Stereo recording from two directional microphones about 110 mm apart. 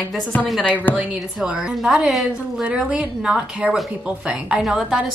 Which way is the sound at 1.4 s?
5° right (ahead or behind).